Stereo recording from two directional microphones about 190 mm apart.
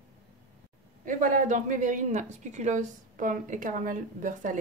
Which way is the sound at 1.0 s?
45° right (ahead or behind).